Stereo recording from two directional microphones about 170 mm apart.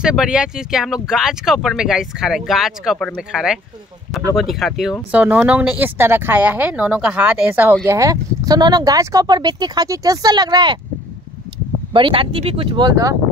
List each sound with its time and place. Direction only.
0.0 s speech: 5° right (ahead or behind); by 10.8 s 25° right (ahead or behind)
11.9 s speech: 30° right (ahead or behind)